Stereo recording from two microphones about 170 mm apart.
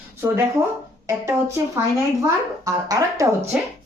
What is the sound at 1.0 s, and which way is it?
A woman's voice, 15° right (ahead or behind).